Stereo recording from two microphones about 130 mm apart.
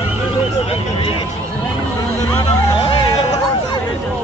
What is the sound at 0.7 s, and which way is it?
Vehicle, 45° left (ahead or behind).